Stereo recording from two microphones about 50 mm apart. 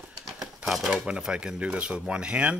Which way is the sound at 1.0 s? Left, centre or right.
Centre.